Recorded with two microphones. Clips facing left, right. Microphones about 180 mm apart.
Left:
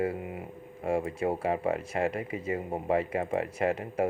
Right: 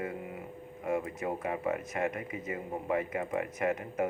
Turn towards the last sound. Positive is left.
turn(degrees=30)  # may be behind; listen again after turning